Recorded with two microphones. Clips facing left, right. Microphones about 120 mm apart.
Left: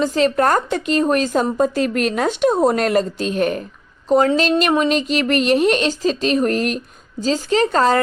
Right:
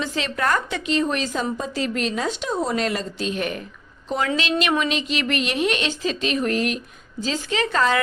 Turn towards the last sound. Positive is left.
turn(degrees=40)  # may be behind; listen again after turning